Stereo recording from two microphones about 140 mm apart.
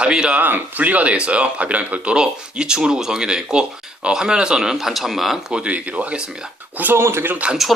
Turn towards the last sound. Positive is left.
turn(degrees=-5)  # may be behind; listen again after turning